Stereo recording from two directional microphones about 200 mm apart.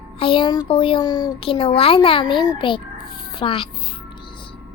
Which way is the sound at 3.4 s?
25° left (ahead or behind).